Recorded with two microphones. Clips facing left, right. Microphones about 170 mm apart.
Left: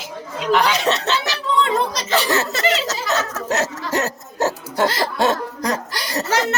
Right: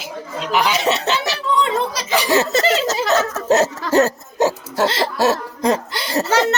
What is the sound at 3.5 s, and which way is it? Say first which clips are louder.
Laughter: right 7 dB; 30° right (ahead or behind).